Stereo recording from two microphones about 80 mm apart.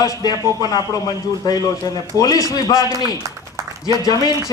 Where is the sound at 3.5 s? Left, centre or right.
Right.